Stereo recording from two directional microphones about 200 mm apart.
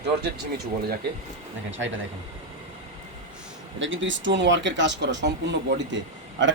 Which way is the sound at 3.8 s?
70° right (ahead or behind).